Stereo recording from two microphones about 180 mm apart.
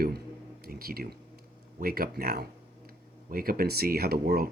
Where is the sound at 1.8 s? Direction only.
55° right (ahead or behind).